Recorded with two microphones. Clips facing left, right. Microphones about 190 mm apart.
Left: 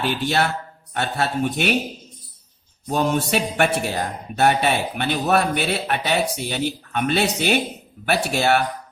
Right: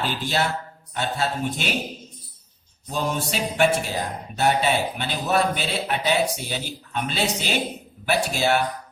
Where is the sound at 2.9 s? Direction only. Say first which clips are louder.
Left 6 dB; 65° left (ahead or behind).